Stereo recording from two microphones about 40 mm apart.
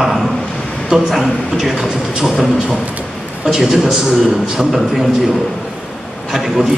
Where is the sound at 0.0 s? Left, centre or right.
Centre.